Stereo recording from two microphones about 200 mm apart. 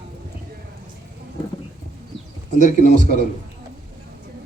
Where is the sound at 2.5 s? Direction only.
40° left (ahead or behind).